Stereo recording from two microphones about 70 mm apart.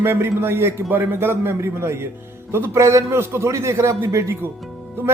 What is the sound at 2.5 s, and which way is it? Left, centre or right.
A man's voice, right.